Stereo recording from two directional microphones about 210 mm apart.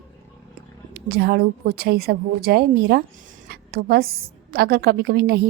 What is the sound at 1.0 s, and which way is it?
A woman's voice, 50° right (ahead or behind).